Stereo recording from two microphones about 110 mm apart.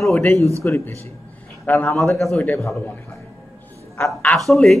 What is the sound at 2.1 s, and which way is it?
Speech, 5° left (ahead or behind).